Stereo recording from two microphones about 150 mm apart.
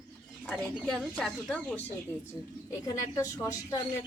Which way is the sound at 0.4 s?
10° left (ahead or behind).